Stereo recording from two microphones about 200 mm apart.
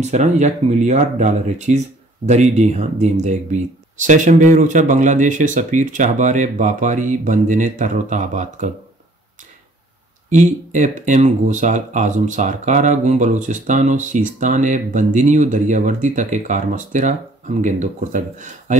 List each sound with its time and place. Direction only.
0.0 s speech: 35° right (ahead or behind)
10.3 s speech: 40° right (ahead or behind)